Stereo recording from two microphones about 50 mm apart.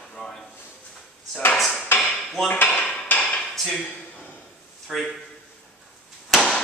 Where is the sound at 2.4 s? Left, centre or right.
Left.